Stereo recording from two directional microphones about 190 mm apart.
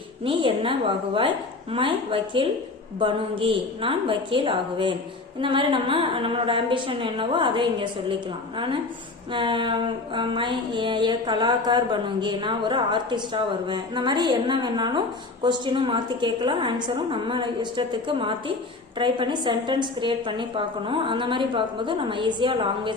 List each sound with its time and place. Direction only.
0.3 s a woman's voice: 25° right (ahead or behind)